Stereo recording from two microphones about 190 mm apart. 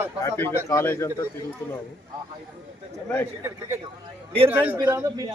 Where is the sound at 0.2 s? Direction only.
15° left (ahead or behind).